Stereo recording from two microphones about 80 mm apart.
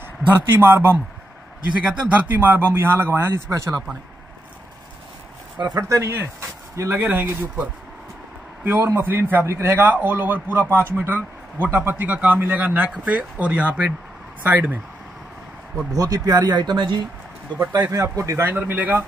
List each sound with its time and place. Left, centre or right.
0.5 s a man's voice: right
1.8 s a man's voice: centre; by 3.7 s right
5.8 s a man's voice: right
15.9 s speech: right
17.9 s speech: right
18.4 s a man's voice: right